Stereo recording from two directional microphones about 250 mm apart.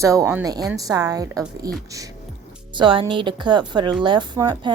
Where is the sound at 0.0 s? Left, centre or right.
Centre.